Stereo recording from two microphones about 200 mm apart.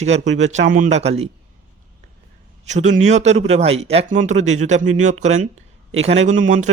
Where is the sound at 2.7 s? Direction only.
35° right (ahead or behind).